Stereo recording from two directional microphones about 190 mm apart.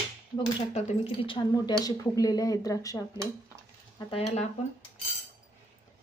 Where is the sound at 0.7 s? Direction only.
25° left (ahead or behind).